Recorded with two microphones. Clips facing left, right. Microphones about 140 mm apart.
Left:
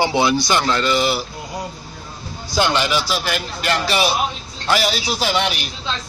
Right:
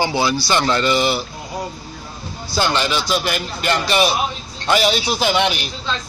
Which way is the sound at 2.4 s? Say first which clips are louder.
Left 1 dB; 15° left (ahead or behind).